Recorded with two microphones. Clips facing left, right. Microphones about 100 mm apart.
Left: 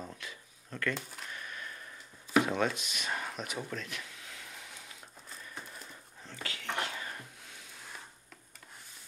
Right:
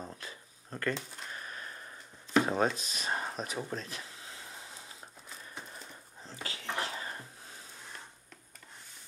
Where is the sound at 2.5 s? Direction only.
35° right (ahead or behind).